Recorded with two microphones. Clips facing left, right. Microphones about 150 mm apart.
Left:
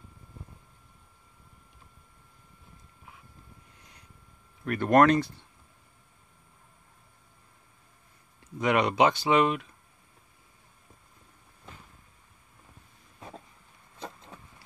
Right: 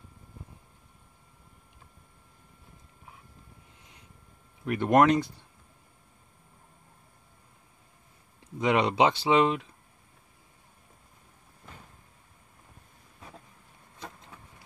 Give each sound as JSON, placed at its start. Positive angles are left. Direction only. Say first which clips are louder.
{"t": 4.6, "sound": "speech", "louder": "left 1 dB", "side_deg": -15}
{"t": 8.5, "sound": "speech", "louder": "even", "side_deg": -20}